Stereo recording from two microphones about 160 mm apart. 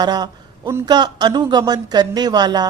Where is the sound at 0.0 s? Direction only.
25° right (ahead or behind).